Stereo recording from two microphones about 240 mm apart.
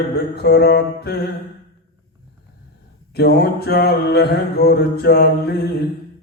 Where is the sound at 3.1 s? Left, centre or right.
Left.